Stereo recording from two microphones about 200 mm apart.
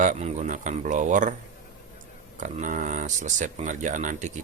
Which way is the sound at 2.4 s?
40° right (ahead or behind).